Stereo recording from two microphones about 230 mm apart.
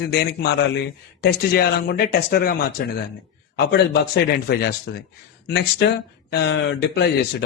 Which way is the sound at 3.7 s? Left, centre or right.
Left.